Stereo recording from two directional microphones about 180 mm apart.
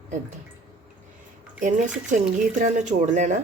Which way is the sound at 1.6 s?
45° right (ahead or behind).